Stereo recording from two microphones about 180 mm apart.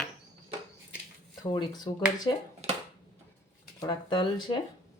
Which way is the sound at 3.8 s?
25° left (ahead or behind).